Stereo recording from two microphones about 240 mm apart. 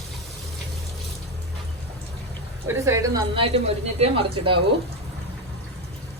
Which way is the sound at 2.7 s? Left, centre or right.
Centre.